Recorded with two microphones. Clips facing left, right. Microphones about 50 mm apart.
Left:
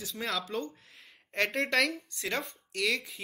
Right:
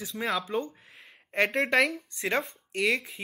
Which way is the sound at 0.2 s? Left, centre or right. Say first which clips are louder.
Right 4 dB; centre.